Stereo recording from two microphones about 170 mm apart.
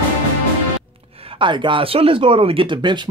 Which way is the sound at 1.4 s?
30° right (ahead or behind).